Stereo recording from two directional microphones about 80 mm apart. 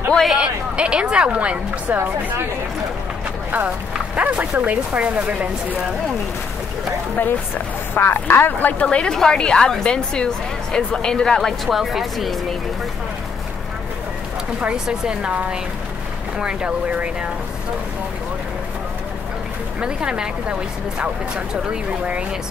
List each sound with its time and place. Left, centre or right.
0.1 s a sound: centre
0.4 s speech: centre
2.0 s speech: right
3.5 s speech: centre
7.2 s speech: left
8.8 s a woman's voice: centre
14.6 s speech: centre
19.8 s speech: centre